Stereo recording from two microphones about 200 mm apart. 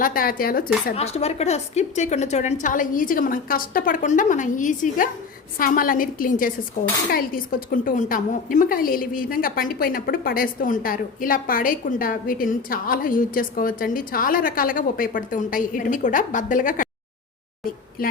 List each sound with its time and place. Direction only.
0.0 s a woman's voice: 45° left (ahead or behind)
0.9 s a woman's voice: 30° left (ahead or behind)
18.0 s a woman's voice: 45° left (ahead or behind)